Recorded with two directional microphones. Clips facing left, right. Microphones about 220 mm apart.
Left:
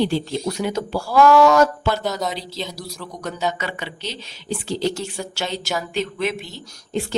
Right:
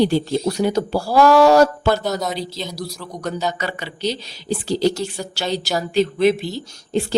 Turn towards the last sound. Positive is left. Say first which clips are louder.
# right 4 dB
turn(degrees=-35)  # may be behind; listen again after turning